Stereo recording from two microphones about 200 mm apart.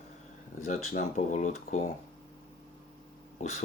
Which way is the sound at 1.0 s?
35° left (ahead or behind).